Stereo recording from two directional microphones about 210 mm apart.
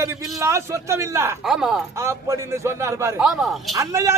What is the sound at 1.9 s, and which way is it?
A man's voice, 15° right (ahead or behind).